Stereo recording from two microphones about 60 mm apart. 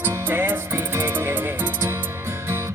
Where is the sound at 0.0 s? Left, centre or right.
Right.